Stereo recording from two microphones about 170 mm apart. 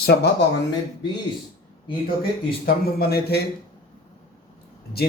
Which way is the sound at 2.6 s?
65° left (ahead or behind).